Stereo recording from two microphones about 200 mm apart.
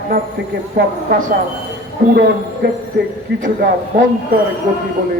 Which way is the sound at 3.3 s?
55° right (ahead or behind).